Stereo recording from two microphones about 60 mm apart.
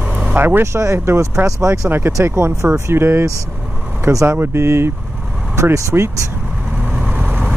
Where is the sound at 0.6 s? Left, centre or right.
Right.